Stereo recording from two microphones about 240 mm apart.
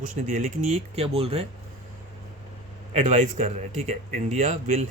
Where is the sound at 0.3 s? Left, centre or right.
Right.